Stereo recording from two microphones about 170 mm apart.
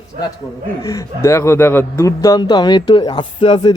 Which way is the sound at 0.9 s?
20° left (ahead or behind).